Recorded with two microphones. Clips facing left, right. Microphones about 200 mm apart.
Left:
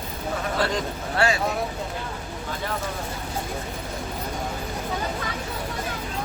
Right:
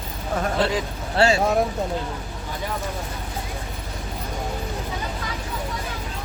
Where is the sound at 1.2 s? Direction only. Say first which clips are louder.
Right 5 dB; 30° right (ahead or behind).